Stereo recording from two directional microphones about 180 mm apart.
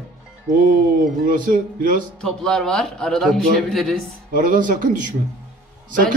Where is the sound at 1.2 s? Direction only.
45° right (ahead or behind).